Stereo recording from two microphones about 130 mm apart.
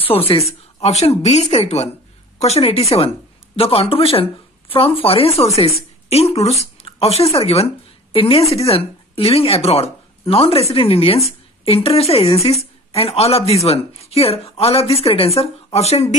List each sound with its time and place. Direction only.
0.3 s a woman's voice: 50° left (ahead or behind)